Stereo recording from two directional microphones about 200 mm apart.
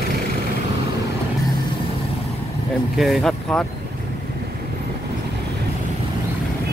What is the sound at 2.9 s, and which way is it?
Speech, centre (ahead or behind).